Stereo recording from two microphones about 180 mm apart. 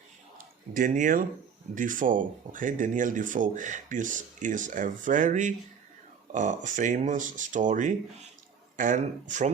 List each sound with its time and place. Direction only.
0.7 s speech: 50° right (ahead or behind)